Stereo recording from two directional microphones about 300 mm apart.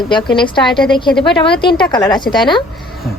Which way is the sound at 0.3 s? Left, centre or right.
Centre.